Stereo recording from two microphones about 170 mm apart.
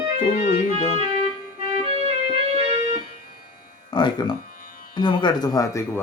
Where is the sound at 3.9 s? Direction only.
25° left (ahead or behind).